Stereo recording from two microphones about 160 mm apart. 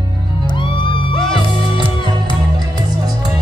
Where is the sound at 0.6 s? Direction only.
30° left (ahead or behind).